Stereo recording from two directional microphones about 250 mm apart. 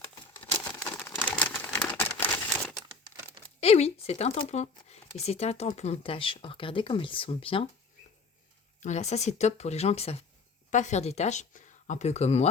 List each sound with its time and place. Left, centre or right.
0.3 s crumpling: centre
0.9 s a sound: centre
3.6 s speech: left
8.8 s speech: left